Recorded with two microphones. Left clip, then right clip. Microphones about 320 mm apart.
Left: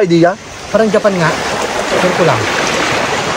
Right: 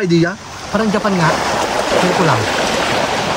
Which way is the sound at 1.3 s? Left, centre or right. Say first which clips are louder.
Even; right.